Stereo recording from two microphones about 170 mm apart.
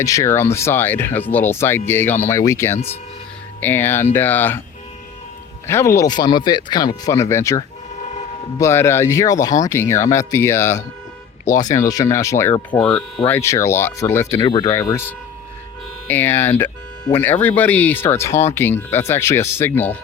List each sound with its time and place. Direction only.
0.0 s speech: 20° left (ahead or behind)
5.6 s speech: 15° left (ahead or behind)